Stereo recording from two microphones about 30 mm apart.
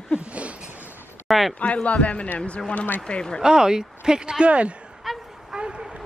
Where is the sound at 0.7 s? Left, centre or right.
Right.